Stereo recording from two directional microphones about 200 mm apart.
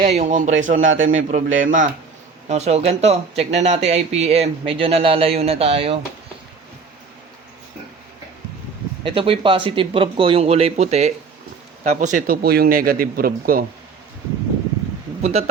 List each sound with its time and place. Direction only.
0.0 s speech: 35° right (ahead or behind)
9.0 s speech: 25° right (ahead or behind); by 13.7 s 45° right (ahead or behind)
15.2 s a man's voice: 30° right (ahead or behind)